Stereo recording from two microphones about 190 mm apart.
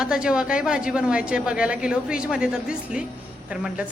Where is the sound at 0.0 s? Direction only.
5° right (ahead or behind).